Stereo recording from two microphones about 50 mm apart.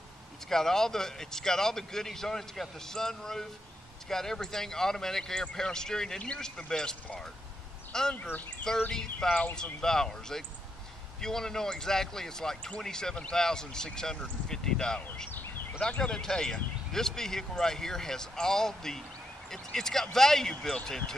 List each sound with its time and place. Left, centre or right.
0.5 s speech: centre
8.2 s speech: left
8.9 s speech: centre
15.3 s a sound: left
16.0 s speech: centre